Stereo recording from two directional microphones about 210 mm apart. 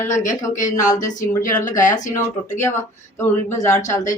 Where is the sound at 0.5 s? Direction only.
35° left (ahead or behind).